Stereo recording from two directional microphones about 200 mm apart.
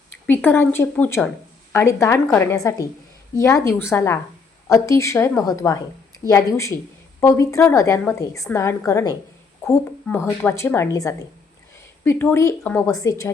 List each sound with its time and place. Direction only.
0.3 s a woman's voice: 10° left (ahead or behind)